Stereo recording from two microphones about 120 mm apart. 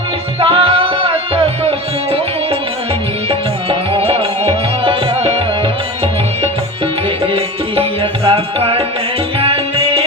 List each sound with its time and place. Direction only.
0.3 s music: 50° right (ahead or behind)
3.2 s music: 50° right (ahead or behind)
7.3 s music: 50° right (ahead or behind)